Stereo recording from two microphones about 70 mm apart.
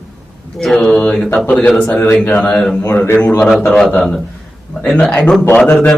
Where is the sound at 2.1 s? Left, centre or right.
Left.